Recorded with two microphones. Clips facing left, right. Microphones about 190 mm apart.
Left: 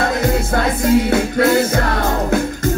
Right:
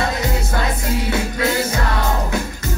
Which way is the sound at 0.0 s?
55° left (ahead or behind).